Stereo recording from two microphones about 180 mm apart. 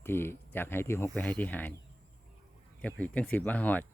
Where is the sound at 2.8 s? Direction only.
5° left (ahead or behind).